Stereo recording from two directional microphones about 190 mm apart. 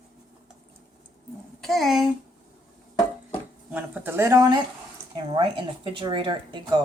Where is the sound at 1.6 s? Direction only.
Centre (ahead or behind).